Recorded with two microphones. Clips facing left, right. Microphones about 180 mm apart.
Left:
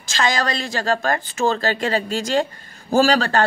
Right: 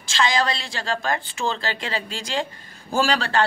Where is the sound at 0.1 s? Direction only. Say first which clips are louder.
Left 1 dB; 45° left (ahead or behind).